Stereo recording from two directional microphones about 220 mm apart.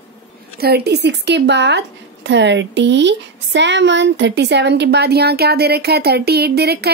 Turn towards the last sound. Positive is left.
turn(degrees=-45)  # may be behind; listen again after turning